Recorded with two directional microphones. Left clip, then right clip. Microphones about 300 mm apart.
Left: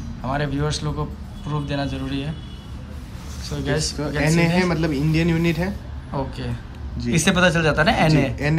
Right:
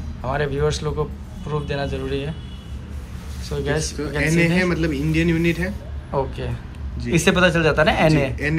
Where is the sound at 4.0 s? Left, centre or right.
Left.